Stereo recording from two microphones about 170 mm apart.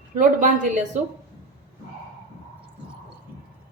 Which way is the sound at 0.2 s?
50° right (ahead or behind).